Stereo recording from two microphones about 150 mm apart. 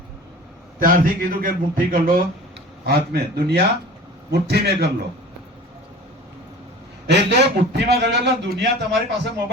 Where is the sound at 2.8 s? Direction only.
90° right.